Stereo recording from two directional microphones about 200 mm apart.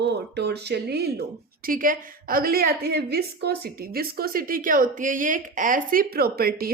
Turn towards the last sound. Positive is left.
turn(degrees=-50)  # may be behind; listen again after turning